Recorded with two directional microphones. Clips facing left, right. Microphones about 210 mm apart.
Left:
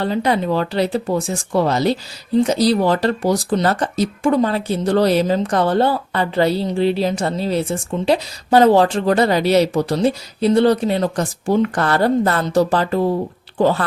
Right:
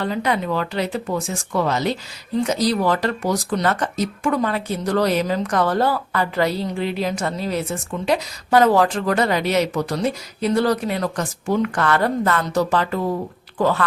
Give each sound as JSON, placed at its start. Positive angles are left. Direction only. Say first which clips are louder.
{"t": 0.0, "sound": "speech", "louder": "left 4 dB", "side_deg": 30}